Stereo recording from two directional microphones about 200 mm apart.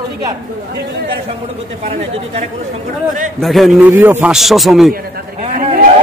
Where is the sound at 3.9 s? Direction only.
10° right (ahead or behind).